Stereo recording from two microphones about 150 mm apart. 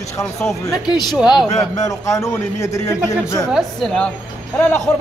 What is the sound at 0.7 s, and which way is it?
Speech, 25° left (ahead or behind).